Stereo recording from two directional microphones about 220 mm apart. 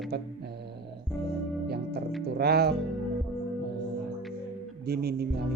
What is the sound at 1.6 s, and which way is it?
Music, 45° right (ahead or behind).